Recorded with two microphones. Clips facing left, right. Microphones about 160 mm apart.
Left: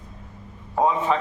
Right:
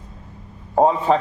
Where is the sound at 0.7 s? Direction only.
35° right (ahead or behind).